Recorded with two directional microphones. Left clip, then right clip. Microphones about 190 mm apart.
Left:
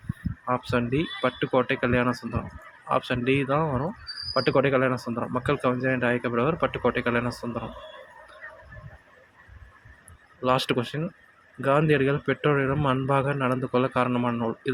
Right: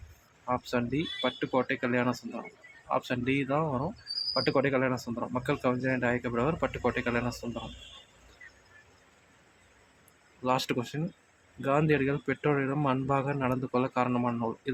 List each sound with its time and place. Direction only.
0.4 s a man's voice: 15° left (ahead or behind)
10.4 s a man's voice: 15° left (ahead or behind)